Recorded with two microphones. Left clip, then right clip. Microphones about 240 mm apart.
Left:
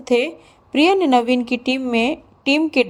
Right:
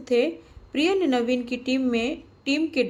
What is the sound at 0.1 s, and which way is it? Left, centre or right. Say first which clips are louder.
Speech: left 4 dB; left.